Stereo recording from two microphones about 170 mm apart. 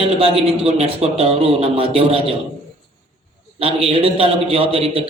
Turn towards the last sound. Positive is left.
turn(degrees=-35)  # may be behind; listen again after turning